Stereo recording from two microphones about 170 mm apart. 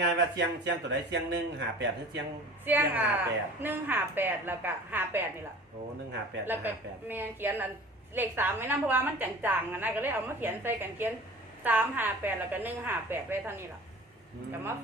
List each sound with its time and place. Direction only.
0.0 s speech: 90° right
2.6 s a woman's voice: 10° right (ahead or behind)
6.4 s a woman's voice: 10° right (ahead or behind)